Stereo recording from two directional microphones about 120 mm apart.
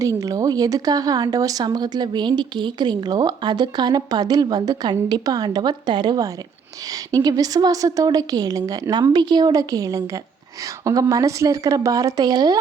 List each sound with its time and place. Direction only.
0.0 s speech: 30° right (ahead or behind)